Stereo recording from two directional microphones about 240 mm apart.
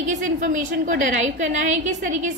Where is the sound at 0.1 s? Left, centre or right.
Right.